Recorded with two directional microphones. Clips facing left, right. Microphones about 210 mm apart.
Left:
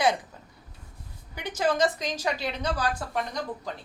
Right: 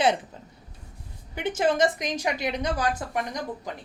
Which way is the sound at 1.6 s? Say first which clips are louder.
Right 1 dB; 20° right (ahead or behind).